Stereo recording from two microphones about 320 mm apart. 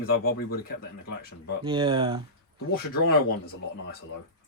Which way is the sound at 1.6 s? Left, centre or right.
Centre.